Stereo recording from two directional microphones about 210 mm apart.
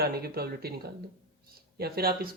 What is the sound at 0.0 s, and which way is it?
Speech, 45° right (ahead or behind).